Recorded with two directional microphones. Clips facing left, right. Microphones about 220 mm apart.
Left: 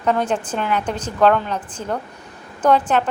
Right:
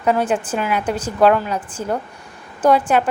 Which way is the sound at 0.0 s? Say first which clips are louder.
Right 2 dB; 10° right (ahead or behind).